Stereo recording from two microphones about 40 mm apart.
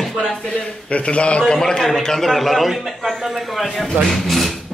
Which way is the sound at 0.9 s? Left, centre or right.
Left.